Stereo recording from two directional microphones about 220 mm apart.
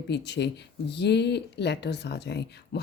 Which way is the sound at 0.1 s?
50° left (ahead or behind).